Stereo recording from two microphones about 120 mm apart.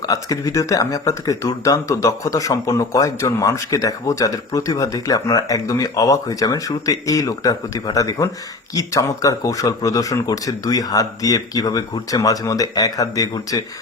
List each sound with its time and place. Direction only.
0.0 s speech: 30° left (ahead or behind)